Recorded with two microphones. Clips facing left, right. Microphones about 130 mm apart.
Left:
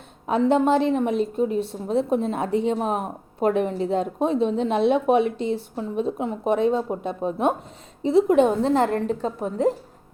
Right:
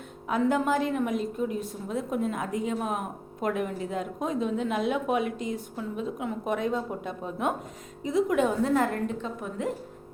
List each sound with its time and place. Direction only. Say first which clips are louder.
0.3 s a woman's voice: left 6 dB; 25° left (ahead or behind)